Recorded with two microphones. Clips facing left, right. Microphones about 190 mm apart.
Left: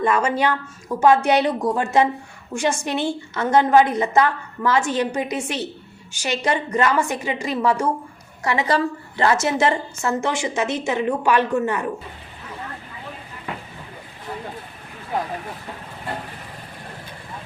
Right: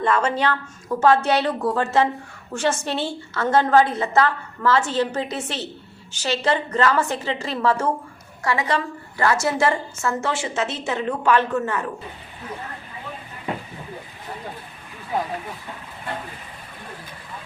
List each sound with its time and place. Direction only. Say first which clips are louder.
0.0 s a woman's voice: left 1 dB; 10° left (ahead or behind)
8.6 s a woman's voice: left 3 dB; 35° left (ahead or behind)
9.2 s a woman's voice: left 1 dB; 20° left (ahead or behind)